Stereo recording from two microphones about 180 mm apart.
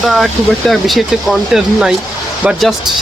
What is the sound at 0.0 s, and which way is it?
Speech, centre (ahead or behind).